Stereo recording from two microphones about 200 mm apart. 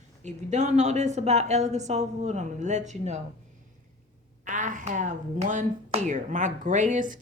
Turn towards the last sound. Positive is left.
turn(degrees=-40)  # may be behind; listen again after turning